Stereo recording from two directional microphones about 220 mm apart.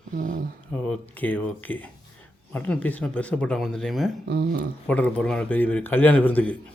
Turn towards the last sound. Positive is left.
turn(degrees=5)  # may be behind; listen again after turning